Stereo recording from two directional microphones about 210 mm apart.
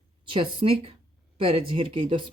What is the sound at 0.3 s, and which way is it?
Speech, 25° right (ahead or behind).